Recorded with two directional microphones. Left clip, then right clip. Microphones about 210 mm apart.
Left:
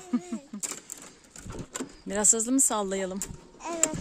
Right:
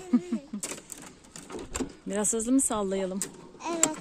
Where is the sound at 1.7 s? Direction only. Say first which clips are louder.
Left 1 dB; 15° left (ahead or behind).